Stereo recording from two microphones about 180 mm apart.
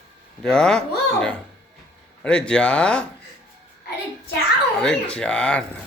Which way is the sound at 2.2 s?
5° left (ahead or behind).